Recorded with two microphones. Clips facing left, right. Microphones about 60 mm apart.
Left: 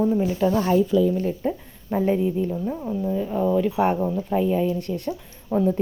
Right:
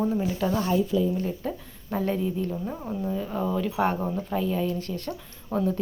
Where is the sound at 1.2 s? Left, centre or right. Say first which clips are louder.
Left 5 dB; left.